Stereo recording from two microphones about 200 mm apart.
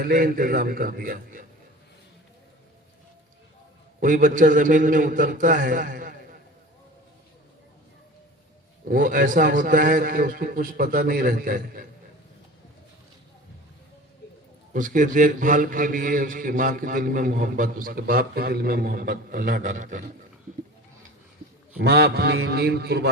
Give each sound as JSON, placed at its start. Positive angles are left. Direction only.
{"t": 0.0, "sound": "a man's voice", "side_deg": -45}
{"t": 4.0, "sound": "a man's voice", "side_deg": -40}
{"t": 8.8, "sound": "a man's voice", "side_deg": -45}
{"t": 14.7, "sound": "a man's voice", "side_deg": -40}
{"t": 21.8, "sound": "a man's voice", "side_deg": -55}